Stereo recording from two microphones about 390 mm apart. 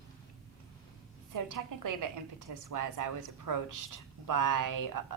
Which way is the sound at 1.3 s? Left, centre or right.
Right.